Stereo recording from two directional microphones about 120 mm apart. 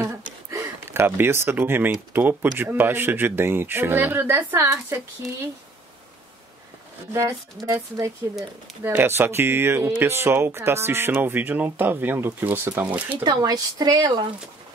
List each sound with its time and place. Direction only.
0.0 s speech: 25° right (ahead or behind)
7.1 s speech: 20° right (ahead or behind)
13.2 s speech: 35° right (ahead or behind)